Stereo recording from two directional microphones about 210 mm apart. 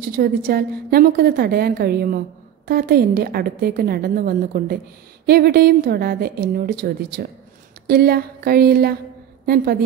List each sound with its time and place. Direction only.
0.2 s a woman's voice: 45° right (ahead or behind)